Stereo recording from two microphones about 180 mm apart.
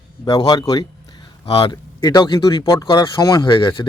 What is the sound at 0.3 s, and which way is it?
A man's voice, 20° left (ahead or behind).